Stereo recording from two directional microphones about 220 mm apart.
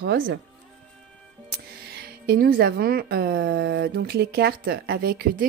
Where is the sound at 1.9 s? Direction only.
45° right (ahead or behind).